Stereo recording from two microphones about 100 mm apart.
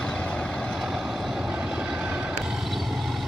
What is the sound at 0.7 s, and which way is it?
Vehicle, 5° right (ahead or behind).